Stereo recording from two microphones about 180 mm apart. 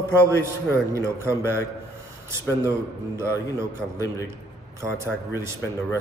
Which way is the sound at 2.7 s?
15° right (ahead or behind).